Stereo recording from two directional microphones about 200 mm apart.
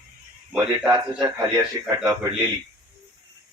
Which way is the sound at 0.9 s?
20° right (ahead or behind).